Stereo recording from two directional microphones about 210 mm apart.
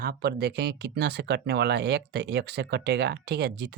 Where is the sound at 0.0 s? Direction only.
50° right (ahead or behind).